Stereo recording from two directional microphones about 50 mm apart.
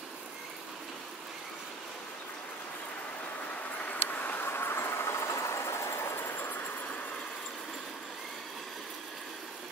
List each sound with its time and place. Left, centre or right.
3.9 s vehicle: left